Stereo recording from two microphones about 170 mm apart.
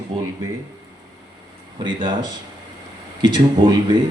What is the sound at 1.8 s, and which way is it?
Speech, 30° right (ahead or behind).